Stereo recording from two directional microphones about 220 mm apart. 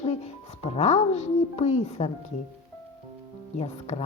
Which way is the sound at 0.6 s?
30° left (ahead or behind).